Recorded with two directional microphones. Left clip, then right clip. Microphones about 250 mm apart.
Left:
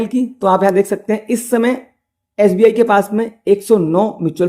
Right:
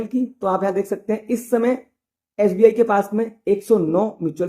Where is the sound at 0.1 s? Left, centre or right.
Left.